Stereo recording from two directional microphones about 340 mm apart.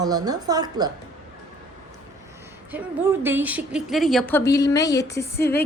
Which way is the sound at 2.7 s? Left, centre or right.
Centre.